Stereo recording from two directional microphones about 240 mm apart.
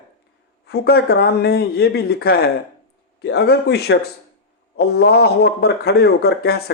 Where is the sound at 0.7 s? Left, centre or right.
Left.